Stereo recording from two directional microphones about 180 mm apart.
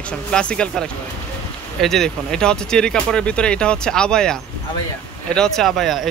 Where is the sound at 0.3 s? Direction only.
5° left (ahead or behind).